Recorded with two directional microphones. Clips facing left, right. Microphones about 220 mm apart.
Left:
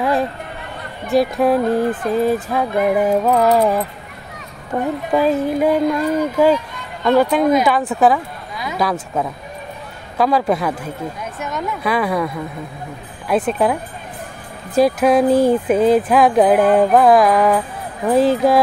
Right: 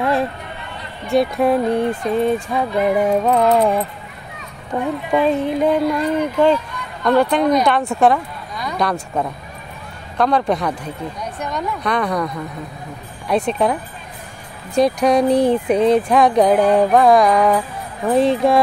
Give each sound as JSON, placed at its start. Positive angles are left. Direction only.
{"t": 0.0, "sound": "a sound", "side_deg": 0}
{"t": 1.1, "sound": "speech", "side_deg": 0}
{"t": 5.1, "sound": "speech", "side_deg": 5}
{"t": 10.1, "sound": "speech", "side_deg": 5}